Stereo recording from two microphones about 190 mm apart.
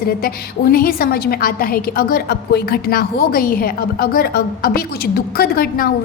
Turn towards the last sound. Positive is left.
turn(degrees=50)  # may be behind; listen again after turning